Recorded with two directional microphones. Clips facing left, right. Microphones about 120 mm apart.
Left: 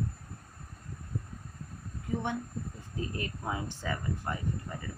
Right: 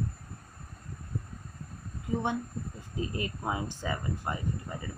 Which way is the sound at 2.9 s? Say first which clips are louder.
Right 3 dB; 20° right (ahead or behind).